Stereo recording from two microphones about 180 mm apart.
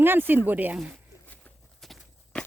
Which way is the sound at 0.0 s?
10° right (ahead or behind).